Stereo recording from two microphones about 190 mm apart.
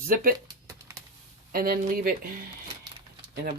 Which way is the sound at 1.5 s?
50° right (ahead or behind).